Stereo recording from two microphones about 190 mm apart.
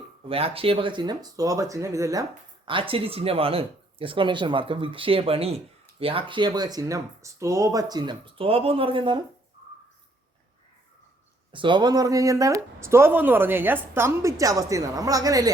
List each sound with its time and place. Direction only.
0.3 s speech: 30° right (ahead or behind)
2.6 s speech: 25° right (ahead or behind)
11.5 s speech: 25° right (ahead or behind)